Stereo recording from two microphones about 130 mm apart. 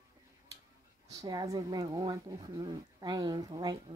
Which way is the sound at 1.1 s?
30° right (ahead or behind).